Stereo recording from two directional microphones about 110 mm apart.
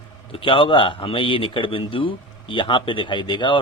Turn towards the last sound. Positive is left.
turn(degrees=45)  # may be behind; listen again after turning